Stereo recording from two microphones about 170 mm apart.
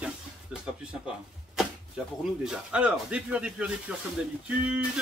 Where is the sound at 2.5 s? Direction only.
5° right (ahead or behind).